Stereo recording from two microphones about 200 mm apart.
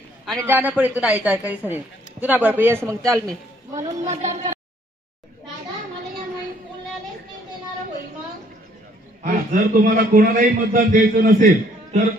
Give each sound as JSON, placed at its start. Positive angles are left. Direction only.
{"t": 0.4, "sound": "a woman's voice", "side_deg": -10}
{"t": 4.1, "sound": "a man's voice", "side_deg": -35}
{"t": 9.2, "sound": "a man's voice", "side_deg": -40}